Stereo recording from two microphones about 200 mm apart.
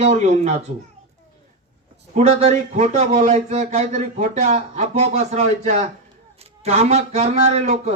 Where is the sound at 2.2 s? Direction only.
35° right (ahead or behind).